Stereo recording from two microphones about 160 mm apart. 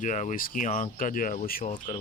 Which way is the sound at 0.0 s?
50° left (ahead or behind).